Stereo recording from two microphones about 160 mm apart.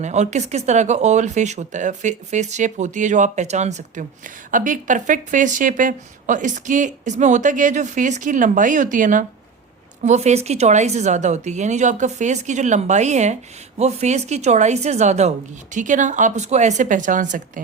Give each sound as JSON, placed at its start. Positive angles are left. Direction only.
{"t": 0.0, "sound": "a woman's voice", "side_deg": -45}